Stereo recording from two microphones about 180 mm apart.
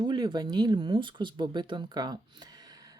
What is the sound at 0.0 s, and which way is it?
Speech, 25° right (ahead or behind).